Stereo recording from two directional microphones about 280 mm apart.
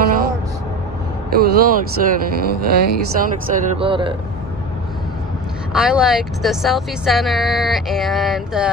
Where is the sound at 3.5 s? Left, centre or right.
Centre.